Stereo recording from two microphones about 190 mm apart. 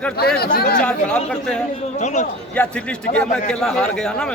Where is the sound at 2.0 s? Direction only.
40° left (ahead or behind).